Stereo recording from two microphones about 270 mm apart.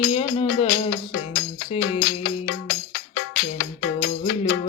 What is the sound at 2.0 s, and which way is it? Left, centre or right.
Music, left.